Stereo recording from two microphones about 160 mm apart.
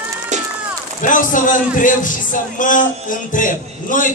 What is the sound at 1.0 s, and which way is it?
A man's voice, 55° left (ahead or behind).